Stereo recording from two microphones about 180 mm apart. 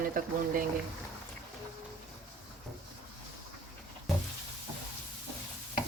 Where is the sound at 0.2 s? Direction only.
50° right (ahead or behind).